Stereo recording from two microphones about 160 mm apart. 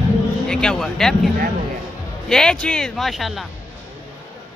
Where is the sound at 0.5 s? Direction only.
5° left (ahead or behind).